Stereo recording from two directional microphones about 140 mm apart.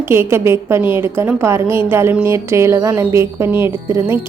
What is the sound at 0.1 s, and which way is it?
A woman's voice, 20° right (ahead or behind).